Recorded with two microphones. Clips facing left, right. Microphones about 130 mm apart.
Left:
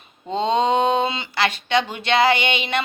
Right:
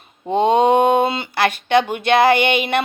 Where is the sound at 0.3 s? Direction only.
55° right (ahead or behind).